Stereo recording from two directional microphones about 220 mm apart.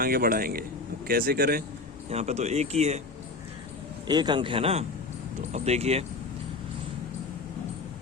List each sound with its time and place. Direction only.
0.0 s a man's voice: 40° right (ahead or behind)
2.0 s speech: 30° right (ahead or behind)
4.0 s speech: 20° right (ahead or behind)